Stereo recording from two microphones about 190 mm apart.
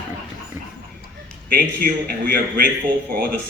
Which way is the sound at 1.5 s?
50° right (ahead or behind).